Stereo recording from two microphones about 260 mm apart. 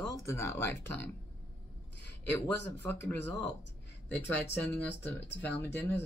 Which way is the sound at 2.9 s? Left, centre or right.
Centre.